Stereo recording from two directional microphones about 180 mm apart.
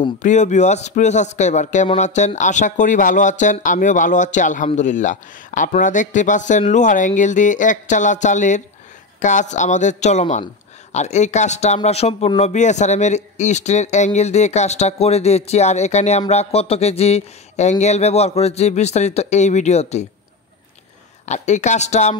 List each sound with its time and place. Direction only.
0.2 s a man's voice: 40° left (ahead or behind)
21.3 s a man's voice: 40° left (ahead or behind)